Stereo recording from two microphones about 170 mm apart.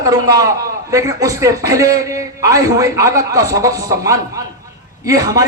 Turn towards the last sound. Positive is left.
turn(degrees=-20)  # may be behind; listen again after turning